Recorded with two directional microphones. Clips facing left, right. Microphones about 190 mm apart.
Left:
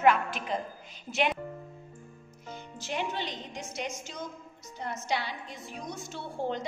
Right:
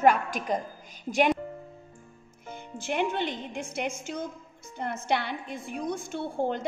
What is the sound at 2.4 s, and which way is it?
A woman's voice, 55° right (ahead or behind).